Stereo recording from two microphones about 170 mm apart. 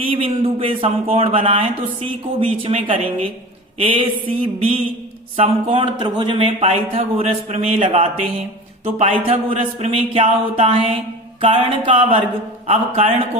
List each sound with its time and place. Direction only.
0.0 s a man's voice: 30° right (ahead or behind)